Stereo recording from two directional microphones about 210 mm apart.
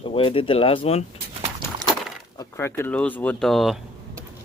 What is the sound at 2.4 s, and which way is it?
Speech, 10° left (ahead or behind).